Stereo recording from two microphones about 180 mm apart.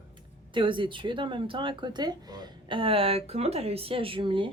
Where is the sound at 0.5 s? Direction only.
25° right (ahead or behind).